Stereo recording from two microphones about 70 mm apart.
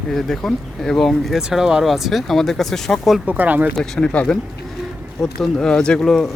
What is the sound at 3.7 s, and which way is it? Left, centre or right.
Speech, centre.